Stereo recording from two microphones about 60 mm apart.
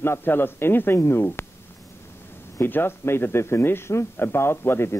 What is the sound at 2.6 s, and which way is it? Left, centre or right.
A man's voice, left.